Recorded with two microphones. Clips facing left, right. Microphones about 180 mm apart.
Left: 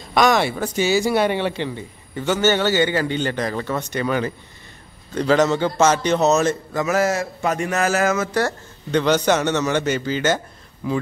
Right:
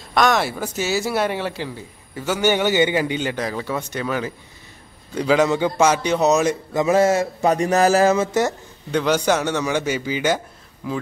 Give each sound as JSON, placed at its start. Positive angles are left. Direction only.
{"t": 0.1, "sound": "a man's voice", "side_deg": 0}
{"t": 8.9, "sound": "a man's voice", "side_deg": -5}
{"t": 10.8, "sound": "speech", "side_deg": 0}